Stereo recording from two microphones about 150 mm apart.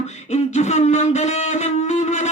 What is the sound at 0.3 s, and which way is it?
Music, 50° left (ahead or behind).